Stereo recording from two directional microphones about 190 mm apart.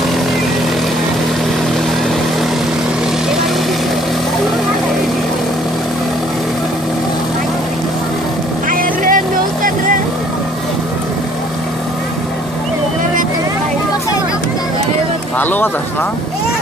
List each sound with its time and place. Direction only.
8.7 s vehicle: 45° right (ahead or behind)
15.4 s speech: 10° left (ahead or behind)